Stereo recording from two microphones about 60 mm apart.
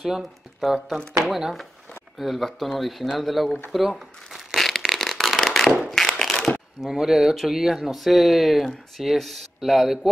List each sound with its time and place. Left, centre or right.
0.0 s speech: centre
4.6 s a sound: centre
6.8 s speech: centre